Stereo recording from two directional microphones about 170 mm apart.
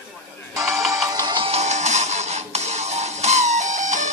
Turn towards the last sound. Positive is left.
turn(degrees=-45)  # may be behind; listen again after turning